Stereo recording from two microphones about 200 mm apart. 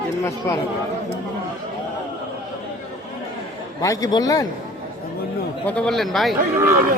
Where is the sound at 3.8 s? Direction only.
15° left (ahead or behind).